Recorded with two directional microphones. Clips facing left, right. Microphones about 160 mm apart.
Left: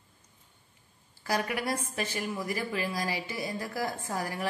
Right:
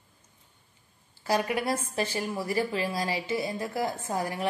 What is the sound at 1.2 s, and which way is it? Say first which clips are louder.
A woman's voice: right 4 dB; 25° right (ahead or behind).